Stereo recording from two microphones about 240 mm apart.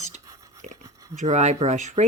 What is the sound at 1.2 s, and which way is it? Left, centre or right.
Speech, right.